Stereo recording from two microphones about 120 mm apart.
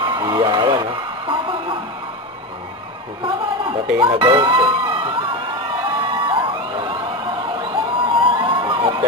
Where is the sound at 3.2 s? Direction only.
45° right (ahead or behind).